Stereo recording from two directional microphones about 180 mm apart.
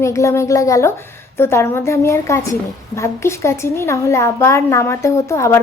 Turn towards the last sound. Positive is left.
turn(degrees=15)  # may be behind; listen again after turning